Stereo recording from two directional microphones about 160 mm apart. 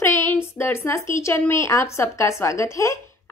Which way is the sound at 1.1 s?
15° left (ahead or behind).